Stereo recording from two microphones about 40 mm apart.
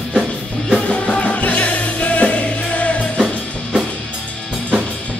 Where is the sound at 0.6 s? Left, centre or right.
Left.